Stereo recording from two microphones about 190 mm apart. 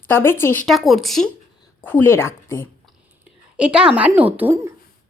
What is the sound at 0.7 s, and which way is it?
Speech, centre (ahead or behind).